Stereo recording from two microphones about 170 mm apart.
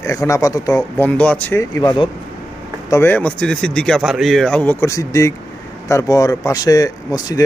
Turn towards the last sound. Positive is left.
turn(degrees=20)  # may be behind; listen again after turning